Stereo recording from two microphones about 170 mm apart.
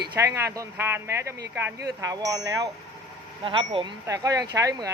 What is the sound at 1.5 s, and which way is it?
Chime, 15° right (ahead or behind).